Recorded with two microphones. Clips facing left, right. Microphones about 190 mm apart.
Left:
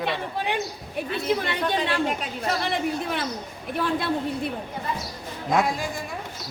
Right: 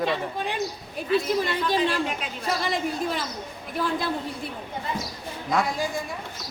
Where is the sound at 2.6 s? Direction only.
60° left (ahead or behind).